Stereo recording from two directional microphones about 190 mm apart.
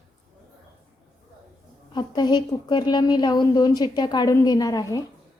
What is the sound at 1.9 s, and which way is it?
A woman's voice, 25° left (ahead or behind).